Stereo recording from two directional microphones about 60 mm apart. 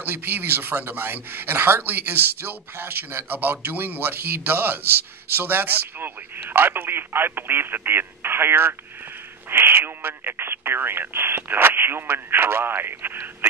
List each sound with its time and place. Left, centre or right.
0.0 s speech: right